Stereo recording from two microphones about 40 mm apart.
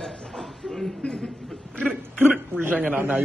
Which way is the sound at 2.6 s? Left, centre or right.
Right.